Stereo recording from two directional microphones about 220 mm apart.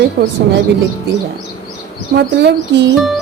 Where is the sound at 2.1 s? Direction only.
50° right (ahead or behind).